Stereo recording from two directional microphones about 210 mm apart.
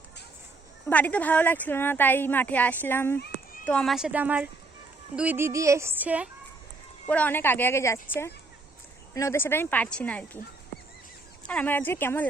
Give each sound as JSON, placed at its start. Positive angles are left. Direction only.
{"t": 0.9, "sound": "a woman's voice", "side_deg": 5}
{"t": 3.2, "sound": "children playing", "side_deg": 50}
{"t": 3.7, "sound": "a woman's voice", "side_deg": 0}
{"t": 5.1, "sound": "music", "side_deg": -5}
{"t": 7.1, "sound": "a woman's voice", "side_deg": 10}
{"t": 11.4, "sound": "a woman's voice", "side_deg": 5}